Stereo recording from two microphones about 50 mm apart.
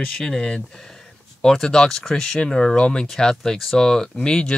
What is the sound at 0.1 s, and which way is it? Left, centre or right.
Speech, centre.